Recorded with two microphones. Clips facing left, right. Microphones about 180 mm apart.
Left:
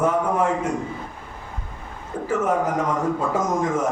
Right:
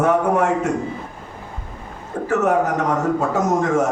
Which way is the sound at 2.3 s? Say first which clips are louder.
Right 3 dB; 75° right (ahead or behind).